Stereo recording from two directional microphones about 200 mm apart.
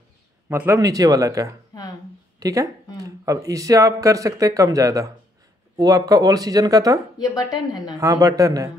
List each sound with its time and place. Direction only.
0.5 s speech: 10° right (ahead or behind)
1.7 s a sound: 20° left (ahead or behind)
2.4 s speech: 15° right (ahead or behind)
8.0 s speech: 15° right (ahead or behind)